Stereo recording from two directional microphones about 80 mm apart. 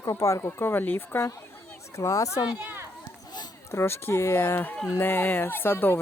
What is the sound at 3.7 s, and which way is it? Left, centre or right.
Speech, left.